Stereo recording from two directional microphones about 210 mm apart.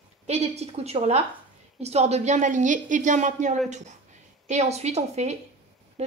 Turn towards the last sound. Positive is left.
turn(degrees=-30)  # may be behind; listen again after turning